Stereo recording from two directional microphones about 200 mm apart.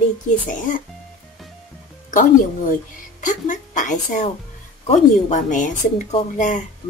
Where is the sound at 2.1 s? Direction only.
40° left (ahead or behind).